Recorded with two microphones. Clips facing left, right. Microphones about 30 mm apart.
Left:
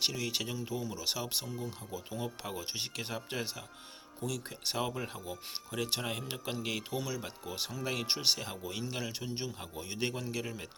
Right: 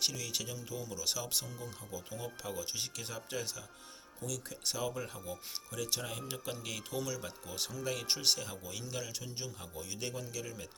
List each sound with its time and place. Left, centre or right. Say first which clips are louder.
0.0 s a man's voice: left 3 dB; left
8.4 s a man's voice: left 5 dB; left